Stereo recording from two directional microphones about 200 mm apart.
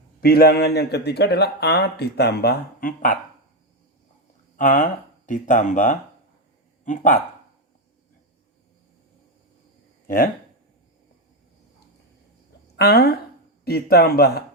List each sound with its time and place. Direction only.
0.2 s speech: 50° left (ahead or behind)
4.5 s speech: 40° left (ahead or behind)
12.7 s speech: 55° left (ahead or behind)